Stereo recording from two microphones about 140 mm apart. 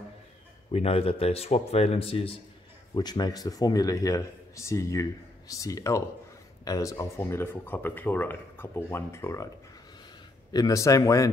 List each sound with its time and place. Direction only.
0.7 s speech: 45° left (ahead or behind)
2.9 s a man's voice: 30° left (ahead or behind)
10.5 s a man's voice: 25° left (ahead or behind)